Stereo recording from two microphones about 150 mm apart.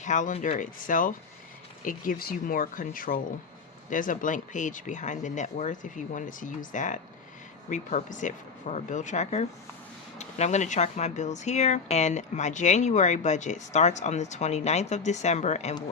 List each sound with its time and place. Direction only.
0.0 s speech: 55° left (ahead or behind)